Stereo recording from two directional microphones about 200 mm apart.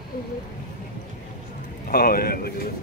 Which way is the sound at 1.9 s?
50° left (ahead or behind).